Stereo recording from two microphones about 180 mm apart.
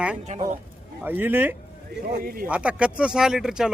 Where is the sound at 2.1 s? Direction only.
55° right (ahead or behind).